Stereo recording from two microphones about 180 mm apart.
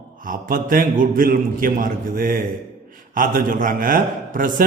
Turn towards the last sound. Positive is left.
turn(degrees=-50)  # may be behind; listen again after turning